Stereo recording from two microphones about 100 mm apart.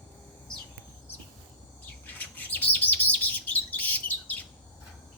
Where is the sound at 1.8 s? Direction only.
20° left (ahead or behind).